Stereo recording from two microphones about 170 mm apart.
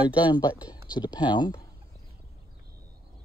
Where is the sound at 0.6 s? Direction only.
25° left (ahead or behind).